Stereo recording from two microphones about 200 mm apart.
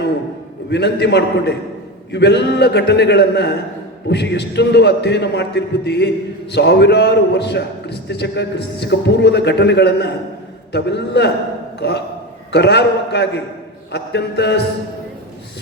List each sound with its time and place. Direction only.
0.7 s a man's voice: 60° left (ahead or behind)